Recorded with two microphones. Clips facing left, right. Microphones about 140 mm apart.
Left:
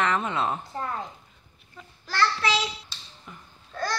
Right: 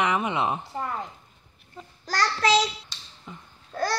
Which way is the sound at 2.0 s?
40° right (ahead or behind).